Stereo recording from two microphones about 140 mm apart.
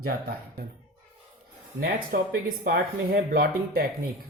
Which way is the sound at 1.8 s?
90° right.